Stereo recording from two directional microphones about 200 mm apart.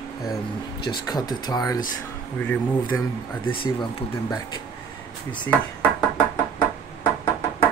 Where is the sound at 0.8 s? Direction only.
20° left (ahead or behind).